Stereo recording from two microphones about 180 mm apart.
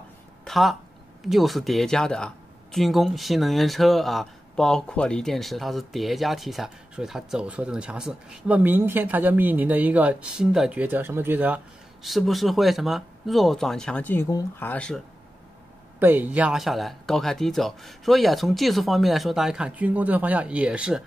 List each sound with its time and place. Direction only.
0.5 s speech: centre (ahead or behind)
16.0 s speech: 10° right (ahead or behind)